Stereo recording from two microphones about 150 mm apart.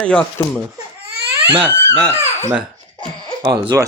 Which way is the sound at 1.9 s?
15° right (ahead or behind).